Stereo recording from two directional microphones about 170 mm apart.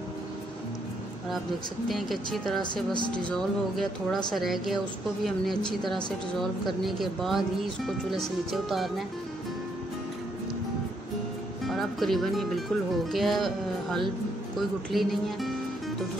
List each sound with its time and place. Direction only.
1.9 s speech: centre (ahead or behind)
2.6 s speech: 25° left (ahead or behind)
3.1 s speech: 5° left (ahead or behind)
11.6 s speech: centre (ahead or behind)